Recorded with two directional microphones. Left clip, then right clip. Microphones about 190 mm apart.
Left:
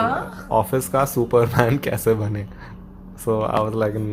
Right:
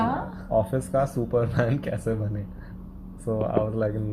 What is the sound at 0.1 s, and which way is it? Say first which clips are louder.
Speech: left 4 dB; 25° left (ahead or behind).